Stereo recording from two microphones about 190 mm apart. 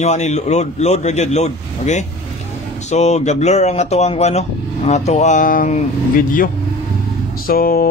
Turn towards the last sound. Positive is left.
turn(degrees=50)  # may be behind; listen again after turning